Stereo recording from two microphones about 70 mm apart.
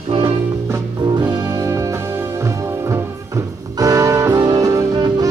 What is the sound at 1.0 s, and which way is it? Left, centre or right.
Music, right.